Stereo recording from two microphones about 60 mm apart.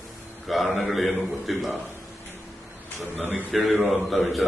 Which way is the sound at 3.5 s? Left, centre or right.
Centre.